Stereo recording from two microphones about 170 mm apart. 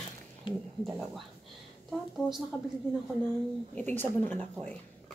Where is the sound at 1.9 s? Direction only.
Centre (ahead or behind).